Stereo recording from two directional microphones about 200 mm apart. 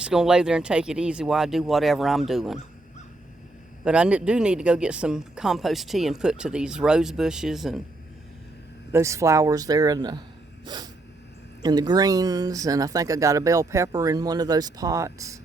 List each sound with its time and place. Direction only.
0.0 s speech: 5° right (ahead or behind)
3.8 s speech: 5° right (ahead or behind)
8.9 s speech: 15° right (ahead or behind)
11.6 s speech: 20° right (ahead or behind)